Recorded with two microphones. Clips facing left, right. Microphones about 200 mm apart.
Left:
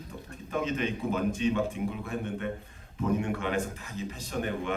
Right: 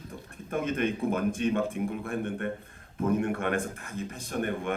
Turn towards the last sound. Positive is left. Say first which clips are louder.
# right 1 dB
turn(degrees=-55)  # may be behind; listen again after turning